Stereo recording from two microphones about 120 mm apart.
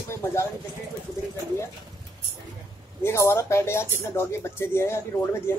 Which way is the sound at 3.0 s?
25° left (ahead or behind).